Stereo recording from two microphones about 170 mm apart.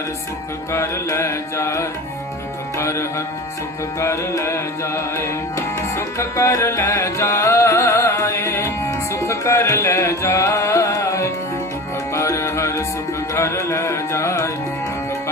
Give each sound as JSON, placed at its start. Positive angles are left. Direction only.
{"t": 0.7, "sound": "music", "side_deg": 15}